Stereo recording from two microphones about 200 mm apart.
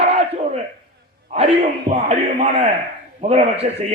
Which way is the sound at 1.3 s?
30° right (ahead or behind).